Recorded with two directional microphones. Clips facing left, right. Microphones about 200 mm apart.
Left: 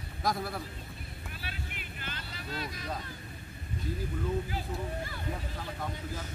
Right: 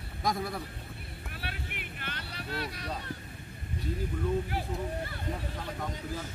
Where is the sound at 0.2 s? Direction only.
Centre (ahead or behind).